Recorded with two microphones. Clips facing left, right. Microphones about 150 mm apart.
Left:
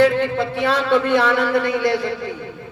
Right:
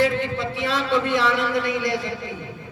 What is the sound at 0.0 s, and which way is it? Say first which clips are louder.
A man's voice: left 6 dB; 60° left (ahead or behind).